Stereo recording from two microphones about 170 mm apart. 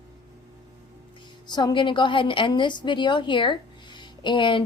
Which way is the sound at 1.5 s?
25° left (ahead or behind).